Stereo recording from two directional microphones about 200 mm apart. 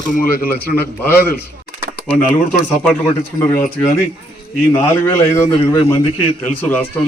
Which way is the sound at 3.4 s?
10° left (ahead or behind).